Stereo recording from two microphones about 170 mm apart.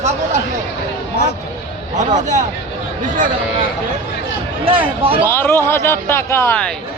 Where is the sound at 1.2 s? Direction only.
65° left (ahead or behind).